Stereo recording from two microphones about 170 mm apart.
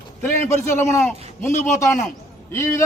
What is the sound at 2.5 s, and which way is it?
Speech, 15° left (ahead or behind).